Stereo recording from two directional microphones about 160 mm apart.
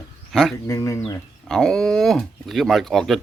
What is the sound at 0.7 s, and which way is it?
Speech, 20° left (ahead or behind).